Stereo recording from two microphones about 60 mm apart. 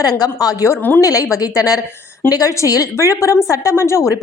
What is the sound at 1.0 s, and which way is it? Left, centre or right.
Speech, left.